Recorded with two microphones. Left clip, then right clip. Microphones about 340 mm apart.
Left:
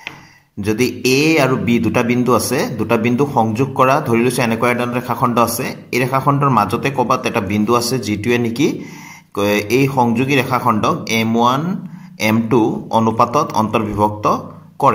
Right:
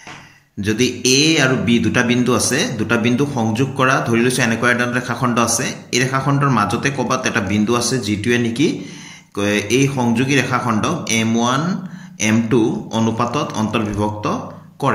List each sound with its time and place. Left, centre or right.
0.6 s speech: centre